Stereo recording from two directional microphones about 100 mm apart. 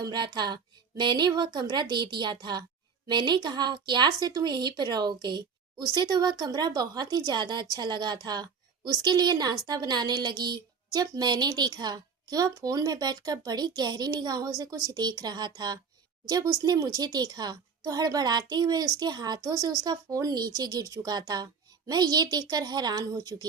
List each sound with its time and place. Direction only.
0.0 s speech: 45° right (ahead or behind)